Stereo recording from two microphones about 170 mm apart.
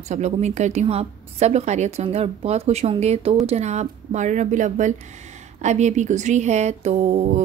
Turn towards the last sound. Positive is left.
turn(degrees=-40)  # may be behind; listen again after turning